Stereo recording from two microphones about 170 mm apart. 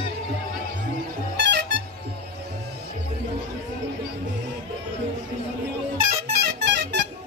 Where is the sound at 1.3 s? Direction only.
85° right.